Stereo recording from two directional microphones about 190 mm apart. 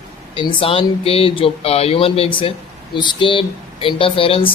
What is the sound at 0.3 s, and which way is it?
Speech, 30° left (ahead or behind).